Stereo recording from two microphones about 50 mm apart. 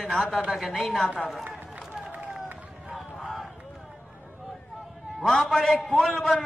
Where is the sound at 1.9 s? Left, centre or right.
Right.